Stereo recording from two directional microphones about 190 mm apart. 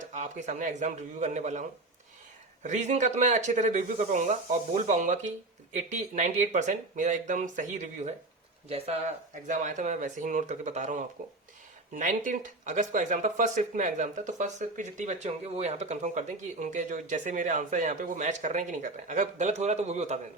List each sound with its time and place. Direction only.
0.1 s speech: 40° right (ahead or behind)
2.6 s speech: 40° right (ahead or behind)
9.5 s speech: 40° right (ahead or behind)